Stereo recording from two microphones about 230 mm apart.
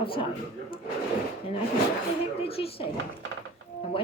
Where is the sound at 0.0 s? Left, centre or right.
Left.